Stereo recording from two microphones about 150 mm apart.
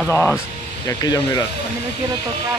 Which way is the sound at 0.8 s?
25° left (ahead or behind).